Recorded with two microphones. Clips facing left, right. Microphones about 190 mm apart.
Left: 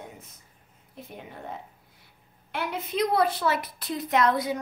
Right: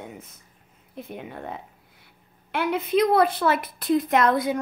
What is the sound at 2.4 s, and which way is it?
A woman's voice, 60° right (ahead or behind).